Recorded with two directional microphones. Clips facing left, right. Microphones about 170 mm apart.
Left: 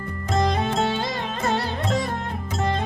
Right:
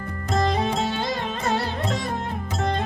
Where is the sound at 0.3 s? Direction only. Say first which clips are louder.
Even; centre (ahead or behind).